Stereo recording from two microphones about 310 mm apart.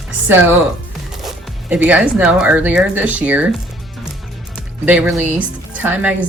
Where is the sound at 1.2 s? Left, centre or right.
Centre.